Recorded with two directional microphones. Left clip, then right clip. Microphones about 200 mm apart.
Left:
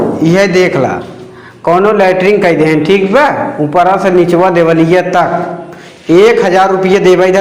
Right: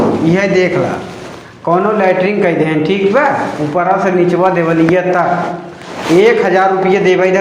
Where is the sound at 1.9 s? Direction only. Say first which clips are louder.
Left 4 dB; 70° left (ahead or behind).